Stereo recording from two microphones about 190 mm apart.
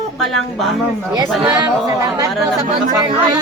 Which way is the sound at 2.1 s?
20° right (ahead or behind).